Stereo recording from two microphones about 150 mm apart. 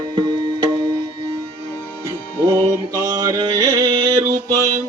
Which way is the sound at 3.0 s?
20° right (ahead or behind).